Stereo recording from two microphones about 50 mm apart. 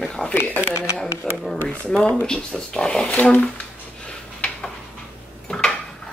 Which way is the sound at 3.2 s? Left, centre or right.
Left.